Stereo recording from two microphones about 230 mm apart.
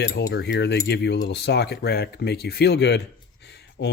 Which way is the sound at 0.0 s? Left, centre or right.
Left.